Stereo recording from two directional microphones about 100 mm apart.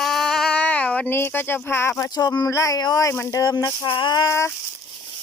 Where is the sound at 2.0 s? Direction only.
35° left (ahead or behind).